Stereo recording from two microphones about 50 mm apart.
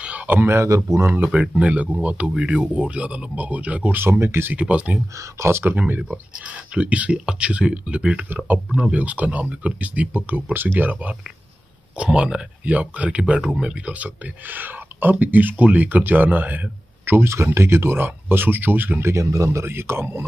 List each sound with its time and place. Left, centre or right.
0.3 s speech: right
0.6 s speech: right
1.1 s speech: right
3.9 s speech: right
4.5 s speech: right
5.4 s speech: right
6.7 s speech: right
12.0 s speech: right
19.0 s speech: right